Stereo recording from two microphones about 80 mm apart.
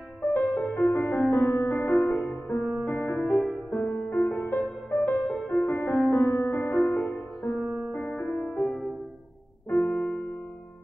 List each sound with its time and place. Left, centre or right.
0.3 s music: left
0.7 s music: centre
1.6 s music: left
1.9 s music: centre